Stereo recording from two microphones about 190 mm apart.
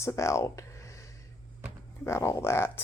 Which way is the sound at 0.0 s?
15° left (ahead or behind).